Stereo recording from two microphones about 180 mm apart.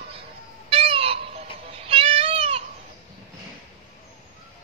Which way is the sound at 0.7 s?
30° right (ahead or behind).